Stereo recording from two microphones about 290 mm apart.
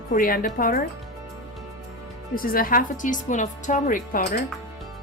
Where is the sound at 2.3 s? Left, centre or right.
Left.